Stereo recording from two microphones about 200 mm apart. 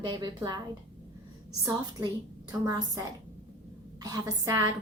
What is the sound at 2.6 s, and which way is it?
Speech, 15° right (ahead or behind).